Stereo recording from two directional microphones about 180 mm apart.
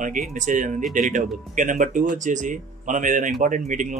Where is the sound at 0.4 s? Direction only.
45° right (ahead or behind).